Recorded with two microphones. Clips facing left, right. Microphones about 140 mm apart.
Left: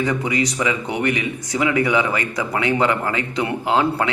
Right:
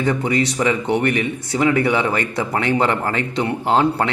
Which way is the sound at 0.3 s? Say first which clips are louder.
Right 3 dB; 45° right (ahead or behind).